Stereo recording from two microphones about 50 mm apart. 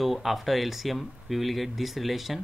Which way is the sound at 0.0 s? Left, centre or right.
Centre.